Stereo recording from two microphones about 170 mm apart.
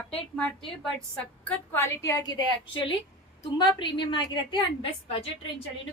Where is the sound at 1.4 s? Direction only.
15° left (ahead or behind).